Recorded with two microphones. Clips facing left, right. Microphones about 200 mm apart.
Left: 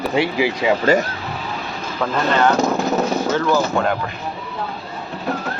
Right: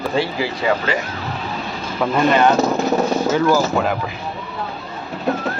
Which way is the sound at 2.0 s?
15° right (ahead or behind).